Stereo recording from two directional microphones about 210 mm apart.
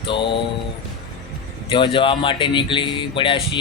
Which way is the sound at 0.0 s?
25° left (ahead or behind).